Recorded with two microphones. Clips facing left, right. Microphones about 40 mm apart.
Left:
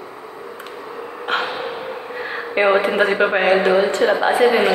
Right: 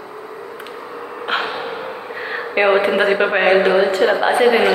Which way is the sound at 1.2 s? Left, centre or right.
Centre.